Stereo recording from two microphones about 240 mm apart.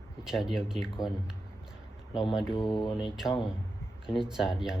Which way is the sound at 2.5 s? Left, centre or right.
Centre.